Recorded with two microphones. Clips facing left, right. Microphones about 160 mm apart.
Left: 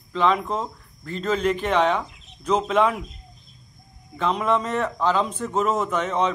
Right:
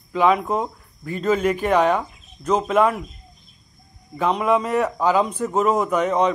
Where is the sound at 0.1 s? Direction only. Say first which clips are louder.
Right 3 dB; 10° right (ahead or behind).